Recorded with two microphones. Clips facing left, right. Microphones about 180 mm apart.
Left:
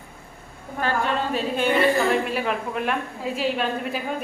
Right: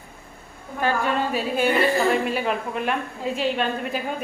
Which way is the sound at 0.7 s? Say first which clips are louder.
Right 1 dB; 10° right (ahead or behind).